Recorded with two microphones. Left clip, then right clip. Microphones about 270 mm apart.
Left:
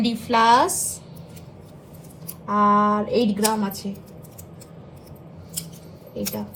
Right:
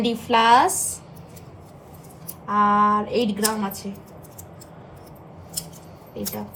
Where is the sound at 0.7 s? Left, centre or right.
Right.